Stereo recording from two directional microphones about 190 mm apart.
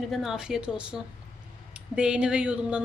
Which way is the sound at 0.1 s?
Centre (ahead or behind).